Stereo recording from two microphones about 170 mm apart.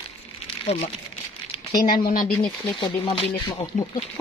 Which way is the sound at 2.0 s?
55° left (ahead or behind).